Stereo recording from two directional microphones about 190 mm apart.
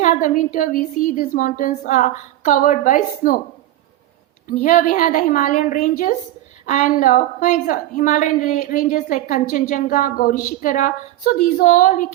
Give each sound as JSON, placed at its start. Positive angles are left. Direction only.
{"t": 0.0, "sound": "a woman's voice", "side_deg": 45}
{"t": 4.4, "sound": "a woman's voice", "side_deg": 45}